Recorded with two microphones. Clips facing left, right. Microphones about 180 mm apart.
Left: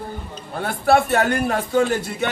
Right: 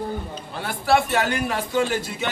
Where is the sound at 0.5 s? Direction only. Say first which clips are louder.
Left 3 dB; 50° left (ahead or behind).